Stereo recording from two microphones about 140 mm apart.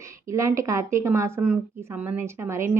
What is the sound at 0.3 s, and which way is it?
A woman's voice, 20° right (ahead or behind).